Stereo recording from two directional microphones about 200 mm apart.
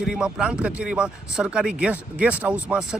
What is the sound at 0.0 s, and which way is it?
Speech, 5° right (ahead or behind).